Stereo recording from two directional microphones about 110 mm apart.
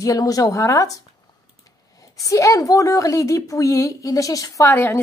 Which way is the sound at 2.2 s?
30° left (ahead or behind).